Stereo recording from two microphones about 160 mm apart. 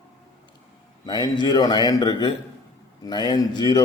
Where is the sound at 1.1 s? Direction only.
25° left (ahead or behind).